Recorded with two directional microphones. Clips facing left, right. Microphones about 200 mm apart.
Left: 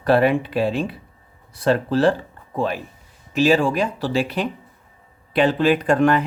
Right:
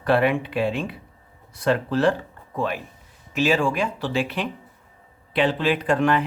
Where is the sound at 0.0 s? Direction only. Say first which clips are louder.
Left 3 dB; 35° left (ahead or behind).